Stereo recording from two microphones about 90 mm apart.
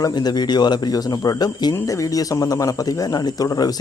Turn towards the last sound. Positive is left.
turn(degrees=45)  # may be behind; listen again after turning